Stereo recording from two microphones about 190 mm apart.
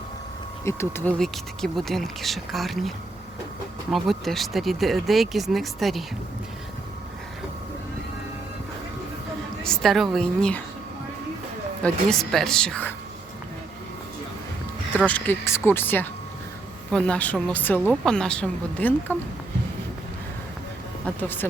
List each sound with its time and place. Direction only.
0.6 s speech: 15° left (ahead or behind)
1.2 s speech: centre (ahead or behind)
3.9 s speech: centre (ahead or behind)
9.6 s speech: centre (ahead or behind)
11.8 s speech: centre (ahead or behind)
14.9 s speech: 10° left (ahead or behind)
21.0 s speech: 10° left (ahead or behind)